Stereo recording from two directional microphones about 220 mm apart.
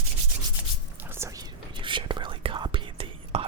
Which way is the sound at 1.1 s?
15° right (ahead or behind).